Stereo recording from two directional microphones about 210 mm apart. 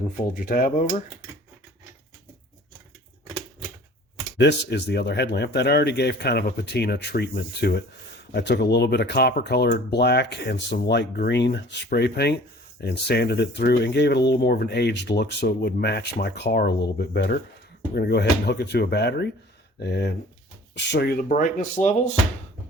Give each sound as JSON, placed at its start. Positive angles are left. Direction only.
{"t": 0.3, "sound": "speech", "side_deg": 45}
{"t": 4.4, "sound": "speech", "side_deg": 55}